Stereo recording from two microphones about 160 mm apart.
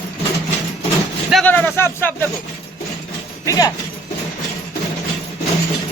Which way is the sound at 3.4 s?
25° left (ahead or behind).